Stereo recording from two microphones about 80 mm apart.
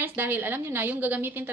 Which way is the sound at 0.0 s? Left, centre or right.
Right.